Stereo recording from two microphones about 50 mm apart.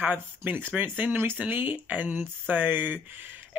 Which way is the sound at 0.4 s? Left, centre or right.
Right.